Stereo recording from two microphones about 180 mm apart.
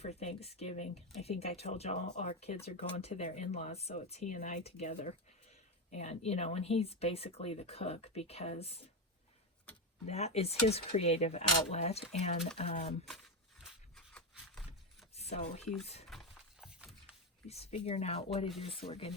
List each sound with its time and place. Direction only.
0.0 s speech: 35° left (ahead or behind)
10.1 s speech: 35° left (ahead or behind)
13.1 s a sound: centre (ahead or behind)
15.1 s speech: 35° left (ahead or behind)
16.0 s a sound: centre (ahead or behind)
17.5 s speech: 35° left (ahead or behind)